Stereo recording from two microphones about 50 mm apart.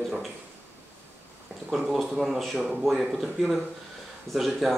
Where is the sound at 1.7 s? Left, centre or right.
Centre.